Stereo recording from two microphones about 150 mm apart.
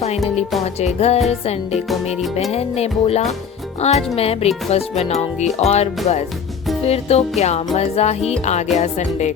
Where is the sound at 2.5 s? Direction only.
45° left (ahead or behind).